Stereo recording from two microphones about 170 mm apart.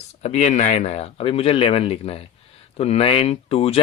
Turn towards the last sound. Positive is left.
turn(degrees=35)  # may be behind; listen again after turning